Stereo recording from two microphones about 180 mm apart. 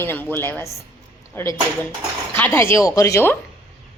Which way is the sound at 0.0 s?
10° left (ahead or behind).